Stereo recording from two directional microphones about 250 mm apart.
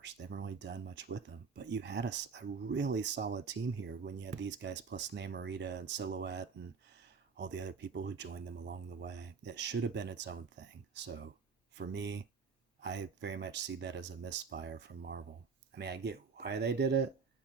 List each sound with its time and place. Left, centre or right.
0.0 s speech: right